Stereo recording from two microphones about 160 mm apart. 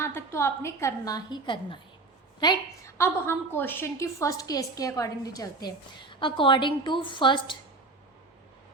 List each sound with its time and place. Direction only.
0.0 s a woman's voice: 15° left (ahead or behind)